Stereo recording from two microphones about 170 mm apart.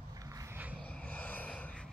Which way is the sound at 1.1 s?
10° left (ahead or behind).